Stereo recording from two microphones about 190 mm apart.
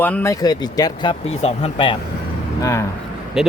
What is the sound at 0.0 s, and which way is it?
Speech, 10° left (ahead or behind).